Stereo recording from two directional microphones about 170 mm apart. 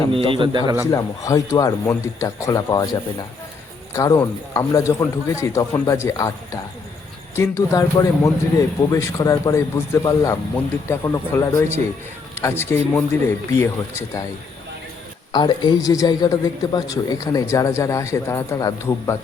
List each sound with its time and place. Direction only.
0.1 s a man's voice: 30° right (ahead or behind)
0.9 s a man's voice: 20° left (ahead or behind)
15.3 s a man's voice: 25° left (ahead or behind)